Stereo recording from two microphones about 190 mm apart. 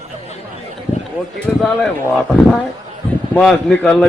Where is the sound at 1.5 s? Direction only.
Centre (ahead or behind).